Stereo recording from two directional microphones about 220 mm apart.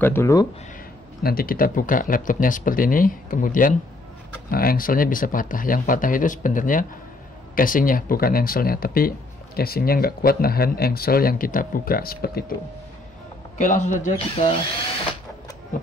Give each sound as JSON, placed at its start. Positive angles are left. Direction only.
{"t": 0.0, "sound": "speech", "side_deg": 10}
{"t": 1.2, "sound": "speech", "side_deg": 40}
{"t": 13.6, "sound": "speech", "side_deg": 35}